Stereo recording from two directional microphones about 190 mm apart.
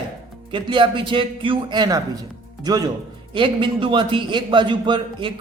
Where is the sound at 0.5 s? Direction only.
25° right (ahead or behind).